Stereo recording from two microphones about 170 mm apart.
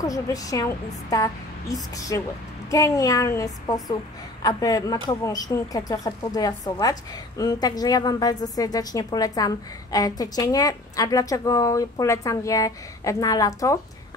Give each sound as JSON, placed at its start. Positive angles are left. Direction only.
{"t": 0.0, "sound": "speech", "side_deg": 20}